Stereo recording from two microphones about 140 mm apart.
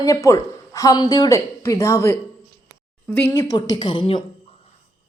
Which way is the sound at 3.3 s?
25° left (ahead or behind).